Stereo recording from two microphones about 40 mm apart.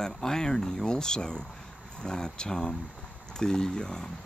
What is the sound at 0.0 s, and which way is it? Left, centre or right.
Speech, centre.